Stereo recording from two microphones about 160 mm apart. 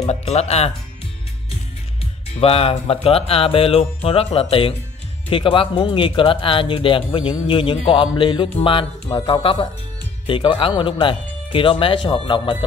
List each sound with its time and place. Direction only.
0.0 s speech: 40° left (ahead or behind)
2.4 s speech: 35° left (ahead or behind)